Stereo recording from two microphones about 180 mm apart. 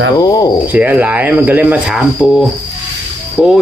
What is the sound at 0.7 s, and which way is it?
Speech, 10° right (ahead or behind).